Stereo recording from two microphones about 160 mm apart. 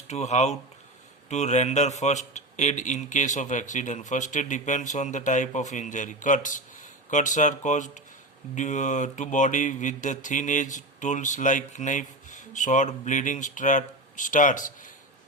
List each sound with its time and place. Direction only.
0.1 s a man's voice: 45° left (ahead or behind)